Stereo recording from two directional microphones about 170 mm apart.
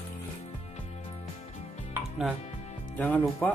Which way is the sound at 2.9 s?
10° left (ahead or behind).